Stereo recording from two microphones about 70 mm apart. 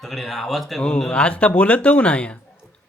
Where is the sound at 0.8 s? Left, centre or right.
Centre.